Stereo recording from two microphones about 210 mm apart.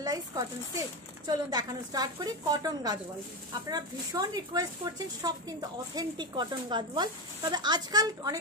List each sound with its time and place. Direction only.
0.0 s a woman's voice: 15° right (ahead or behind)